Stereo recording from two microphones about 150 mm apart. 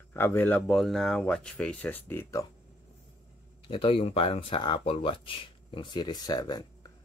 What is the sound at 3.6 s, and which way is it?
Speech, 35° left (ahead or behind).